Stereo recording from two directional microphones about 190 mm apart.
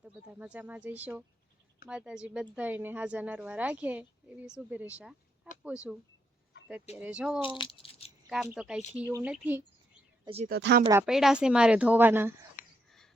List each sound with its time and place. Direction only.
0.0 s a woman's voice: 5° right (ahead or behind)
7.6 s rattle: 30° left (ahead or behind)
8.5 s a woman's voice: 5° right (ahead or behind)
10.2 s speech: 35° right (ahead or behind)
10.5 s speech: 60° right (ahead or behind)
11.0 s speech: centre (ahead or behind)
12.6 s a sound: 45° left (ahead or behind)